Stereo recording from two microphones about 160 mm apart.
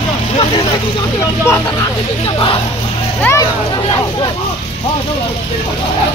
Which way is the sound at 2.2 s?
35° left (ahead or behind).